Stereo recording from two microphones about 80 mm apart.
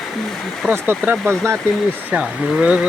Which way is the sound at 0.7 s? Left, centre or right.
Right.